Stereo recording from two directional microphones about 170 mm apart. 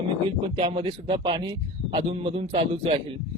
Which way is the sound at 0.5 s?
30° right (ahead or behind).